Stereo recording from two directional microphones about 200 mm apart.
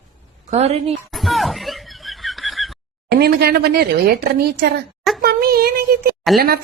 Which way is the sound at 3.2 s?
55° right (ahead or behind).